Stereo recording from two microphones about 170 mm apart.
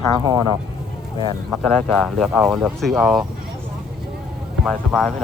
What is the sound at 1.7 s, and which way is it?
Speech, centre (ahead or behind).